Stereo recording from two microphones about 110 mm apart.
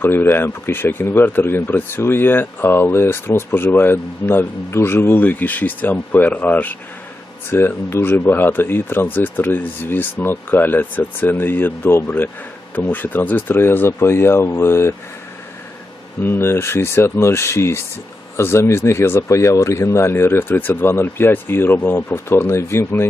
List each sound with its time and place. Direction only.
0.0 s speech: 20° left (ahead or behind)
16.2 s speech: 20° left (ahead or behind)